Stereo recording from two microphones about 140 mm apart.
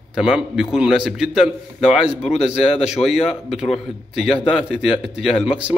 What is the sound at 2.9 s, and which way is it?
Speech, 45° left (ahead or behind).